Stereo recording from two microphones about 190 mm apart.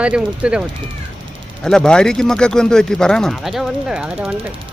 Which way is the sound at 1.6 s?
5° left (ahead or behind).